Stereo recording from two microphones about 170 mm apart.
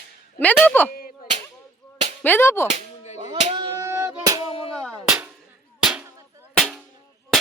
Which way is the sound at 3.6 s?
20° right (ahead or behind).